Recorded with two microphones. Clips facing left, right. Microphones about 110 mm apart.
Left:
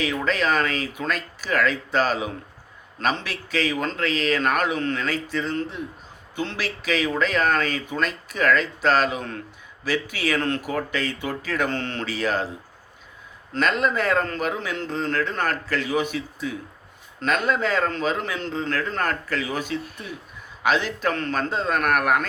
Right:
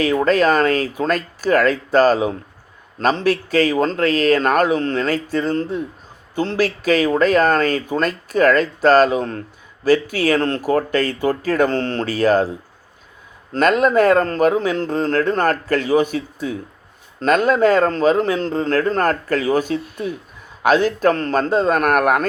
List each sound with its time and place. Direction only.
0.0 s speech: 45° right (ahead or behind)
13.5 s speech: 50° right (ahead or behind)